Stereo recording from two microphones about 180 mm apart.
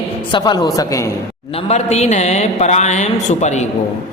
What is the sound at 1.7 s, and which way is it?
A man's voice, 35° left (ahead or behind).